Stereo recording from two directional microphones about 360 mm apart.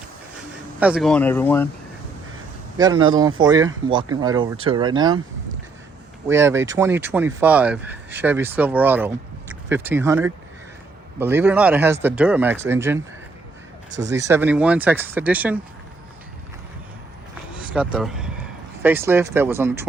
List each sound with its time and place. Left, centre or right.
0.8 s speech: centre
2.7 s speech: centre
6.2 s speech: centre
14.1 s speech: centre
17.6 s speech: centre